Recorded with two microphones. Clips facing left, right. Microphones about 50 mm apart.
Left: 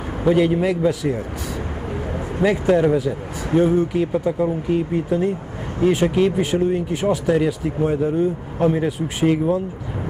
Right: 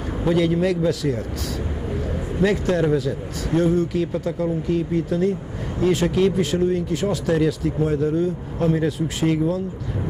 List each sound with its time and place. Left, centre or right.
0.2 s a man's voice: centre
2.4 s speech: centre